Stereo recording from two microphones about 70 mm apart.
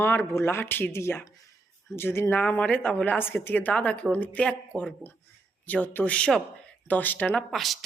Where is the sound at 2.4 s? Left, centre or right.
Centre.